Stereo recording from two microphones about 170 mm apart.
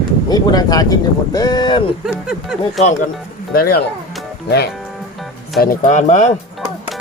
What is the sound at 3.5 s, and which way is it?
Speech, 65° left (ahead or behind).